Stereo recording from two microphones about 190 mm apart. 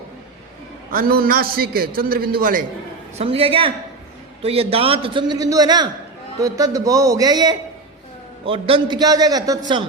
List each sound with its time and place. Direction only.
0.9 s a man's voice: 50° right (ahead or behind)
3.2 s a man's voice: 30° right (ahead or behind)